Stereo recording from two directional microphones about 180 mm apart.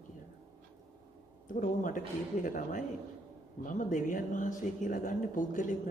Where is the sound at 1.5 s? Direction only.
45° left (ahead or behind).